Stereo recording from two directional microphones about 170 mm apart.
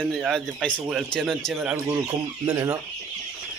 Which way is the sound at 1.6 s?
10° right (ahead or behind).